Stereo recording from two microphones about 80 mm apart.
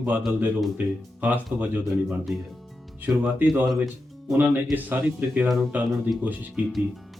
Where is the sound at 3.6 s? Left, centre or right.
Centre.